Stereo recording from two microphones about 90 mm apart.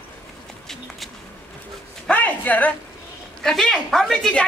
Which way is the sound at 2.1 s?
20° left (ahead or behind).